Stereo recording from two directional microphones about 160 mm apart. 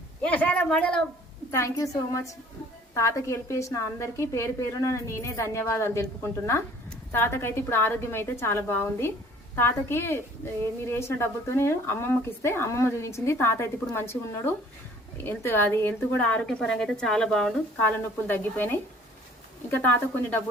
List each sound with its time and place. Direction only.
0.2 s a woman's voice: 10° left (ahead or behind)
1.5 s a woman's voice: 15° left (ahead or behind)